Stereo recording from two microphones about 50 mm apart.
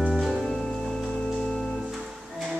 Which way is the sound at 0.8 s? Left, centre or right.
Centre.